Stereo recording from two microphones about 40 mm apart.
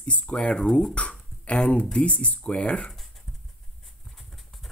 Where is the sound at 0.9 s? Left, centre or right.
Left.